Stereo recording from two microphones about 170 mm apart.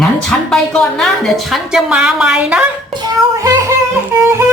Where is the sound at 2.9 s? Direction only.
20° right (ahead or behind).